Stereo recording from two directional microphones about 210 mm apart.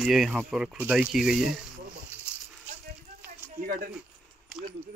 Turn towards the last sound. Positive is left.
turn(degrees=-40)  # may be behind; listen again after turning